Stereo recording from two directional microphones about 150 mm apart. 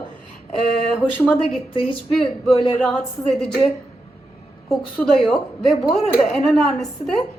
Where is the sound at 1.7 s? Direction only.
35° left (ahead or behind).